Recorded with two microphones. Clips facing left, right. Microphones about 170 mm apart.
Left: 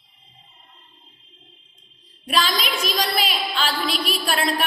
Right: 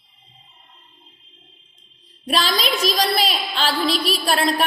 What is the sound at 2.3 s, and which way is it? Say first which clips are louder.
A woman's voice: right 2 dB; 35° right (ahead or behind).